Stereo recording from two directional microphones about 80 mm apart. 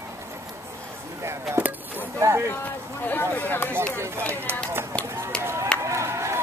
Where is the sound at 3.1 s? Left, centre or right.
Left.